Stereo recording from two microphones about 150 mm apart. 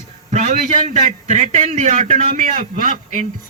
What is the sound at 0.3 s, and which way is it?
A man's voice, 50° right (ahead or behind).